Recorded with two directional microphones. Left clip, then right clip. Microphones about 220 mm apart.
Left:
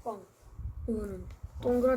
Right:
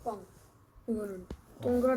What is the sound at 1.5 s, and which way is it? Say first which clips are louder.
Speech: left 2 dB; 15° left (ahead or behind).